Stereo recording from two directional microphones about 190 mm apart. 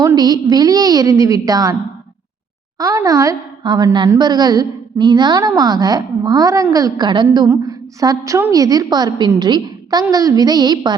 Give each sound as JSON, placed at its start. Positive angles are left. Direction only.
{"t": 0.0, "sound": "a woman's voice", "side_deg": -20}
{"t": 2.7, "sound": "a woman's voice", "side_deg": -20}